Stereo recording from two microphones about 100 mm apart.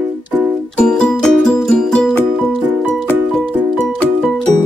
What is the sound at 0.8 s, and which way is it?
Music, 5° left (ahead or behind).